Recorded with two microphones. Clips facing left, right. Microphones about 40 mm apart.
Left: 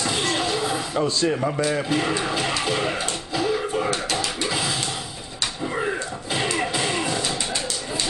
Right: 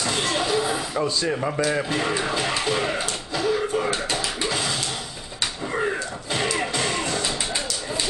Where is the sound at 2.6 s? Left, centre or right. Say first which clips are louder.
Even; centre.